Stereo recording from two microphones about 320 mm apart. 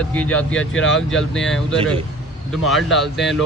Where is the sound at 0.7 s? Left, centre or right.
Left.